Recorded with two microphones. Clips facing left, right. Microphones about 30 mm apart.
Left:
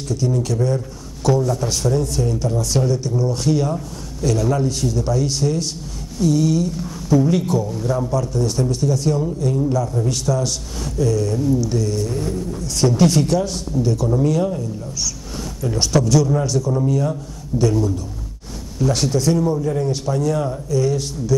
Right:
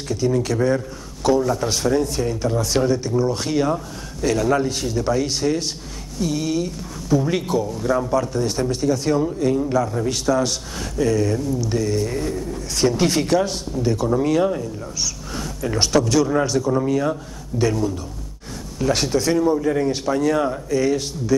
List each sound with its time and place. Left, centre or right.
0.2 s a man's voice: right
1.2 s speech: centre
12.2 s bird: centre
12.6 s speech: centre
14.1 s speech: right